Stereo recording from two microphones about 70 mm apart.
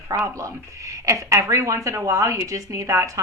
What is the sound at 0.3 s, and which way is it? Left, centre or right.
Speech, right.